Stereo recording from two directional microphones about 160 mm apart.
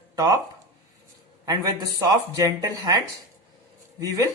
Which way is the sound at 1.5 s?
25° right (ahead or behind).